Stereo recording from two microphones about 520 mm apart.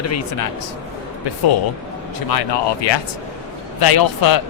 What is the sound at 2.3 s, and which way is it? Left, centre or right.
Speech, left.